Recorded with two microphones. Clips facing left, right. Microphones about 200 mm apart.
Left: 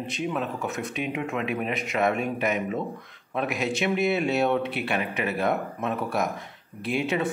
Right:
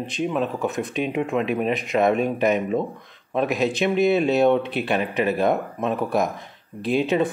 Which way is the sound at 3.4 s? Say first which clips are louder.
Right 5 dB; 20° right (ahead or behind).